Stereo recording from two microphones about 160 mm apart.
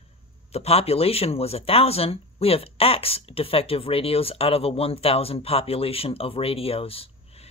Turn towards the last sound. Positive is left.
turn(degrees=35)  # may be behind; listen again after turning